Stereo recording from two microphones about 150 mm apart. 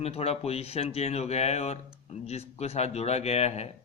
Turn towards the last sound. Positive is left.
turn(degrees=45)  # may be behind; listen again after turning